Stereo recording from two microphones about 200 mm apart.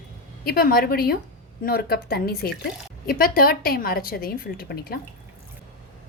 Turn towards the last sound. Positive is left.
turn(degrees=50)  # may be behind; listen again after turning